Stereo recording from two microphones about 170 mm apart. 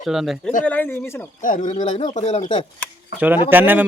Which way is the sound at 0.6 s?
10° left (ahead or behind).